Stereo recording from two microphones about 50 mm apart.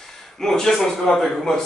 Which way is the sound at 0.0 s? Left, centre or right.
Centre.